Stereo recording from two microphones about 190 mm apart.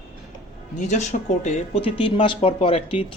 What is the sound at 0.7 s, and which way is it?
Speech, 40° left (ahead or behind).